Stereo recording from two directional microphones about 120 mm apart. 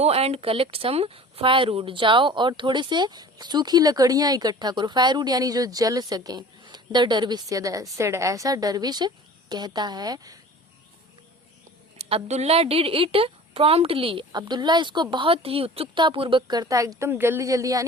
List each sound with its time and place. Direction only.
0.0 s a woman's voice: 60° right (ahead or behind); by 10.3 s 35° right (ahead or behind)
11.9 s a woman's voice: 60° right (ahead or behind); by 17.8 s 30° right (ahead or behind)